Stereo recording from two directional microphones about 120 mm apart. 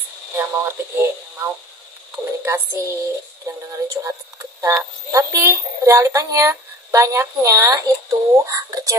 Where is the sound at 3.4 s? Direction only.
25° right (ahead or behind).